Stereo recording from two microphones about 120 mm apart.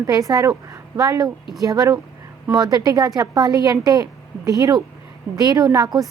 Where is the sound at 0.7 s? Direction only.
30° right (ahead or behind).